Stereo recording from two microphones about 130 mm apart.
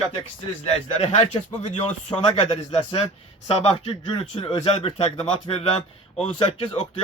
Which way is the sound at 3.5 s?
50° left (ahead or behind).